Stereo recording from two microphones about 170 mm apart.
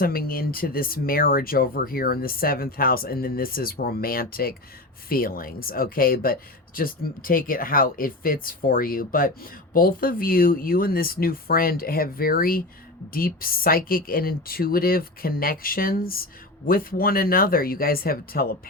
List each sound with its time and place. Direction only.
0.0 s speech: 60° left (ahead or behind)